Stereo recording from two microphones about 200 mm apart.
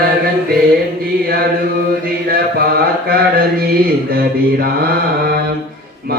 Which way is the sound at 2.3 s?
50° right (ahead or behind).